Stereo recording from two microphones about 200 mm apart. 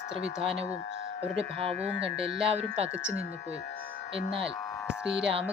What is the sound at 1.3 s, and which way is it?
Speech, 30° right (ahead or behind).